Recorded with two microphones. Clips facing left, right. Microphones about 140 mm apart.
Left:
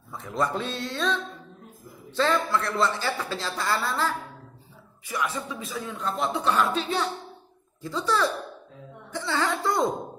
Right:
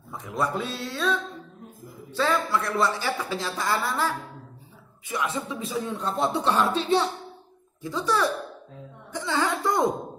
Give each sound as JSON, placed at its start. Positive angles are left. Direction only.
{"t": 0.1, "sound": "a woman's voice", "side_deg": -15}
{"t": 7.8, "sound": "a woman's voice", "side_deg": -15}
{"t": 9.1, "sound": "music", "side_deg": -15}